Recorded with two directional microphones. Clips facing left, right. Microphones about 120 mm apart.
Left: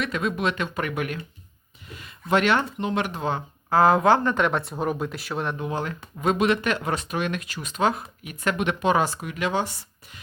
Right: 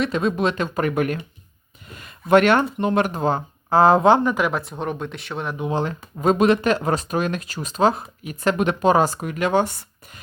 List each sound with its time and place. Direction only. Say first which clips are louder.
0.0 s speech: right 5 dB; 30° right (ahead or behind)
3.7 s speech: right 3 dB; 30° right (ahead or behind)
4.2 s speech: right 2 dB; 5° right (ahead or behind)
5.5 s speech: right 5 dB; 25° right (ahead or behind); by 10.2 s 50° right (ahead or behind)